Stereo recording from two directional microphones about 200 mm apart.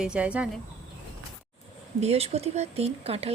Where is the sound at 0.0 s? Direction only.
5° right (ahead or behind).